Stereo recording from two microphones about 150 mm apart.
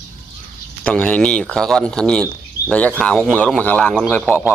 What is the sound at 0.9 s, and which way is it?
Speech, 10° left (ahead or behind).